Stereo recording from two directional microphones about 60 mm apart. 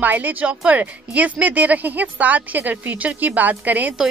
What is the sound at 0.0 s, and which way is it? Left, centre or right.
A woman's voice, right.